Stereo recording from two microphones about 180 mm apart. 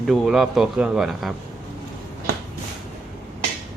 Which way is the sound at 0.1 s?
Centre (ahead or behind).